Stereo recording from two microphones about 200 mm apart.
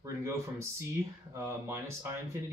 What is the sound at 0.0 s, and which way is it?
Speech, 15° right (ahead or behind).